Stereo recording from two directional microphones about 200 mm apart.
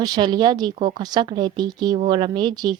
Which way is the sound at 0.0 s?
20° right (ahead or behind).